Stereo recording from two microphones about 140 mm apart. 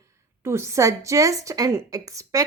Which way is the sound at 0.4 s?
20° right (ahead or behind).